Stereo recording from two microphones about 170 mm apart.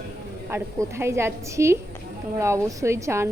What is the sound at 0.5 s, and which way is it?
Speech, 15° right (ahead or behind).